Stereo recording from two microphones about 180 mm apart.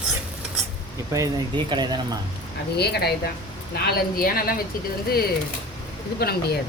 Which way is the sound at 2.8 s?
60° left (ahead or behind).